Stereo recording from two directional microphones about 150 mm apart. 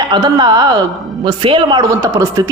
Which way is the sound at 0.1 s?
25° right (ahead or behind).